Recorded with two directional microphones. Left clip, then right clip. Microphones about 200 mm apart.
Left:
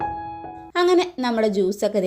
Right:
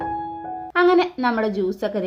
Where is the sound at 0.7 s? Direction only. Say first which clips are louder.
Right 2 dB; 20° left (ahead or behind).